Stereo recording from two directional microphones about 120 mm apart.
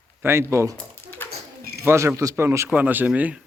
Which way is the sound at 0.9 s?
15° left (ahead or behind).